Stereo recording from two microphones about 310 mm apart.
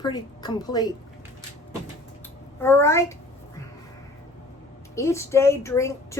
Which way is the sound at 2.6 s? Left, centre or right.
Centre.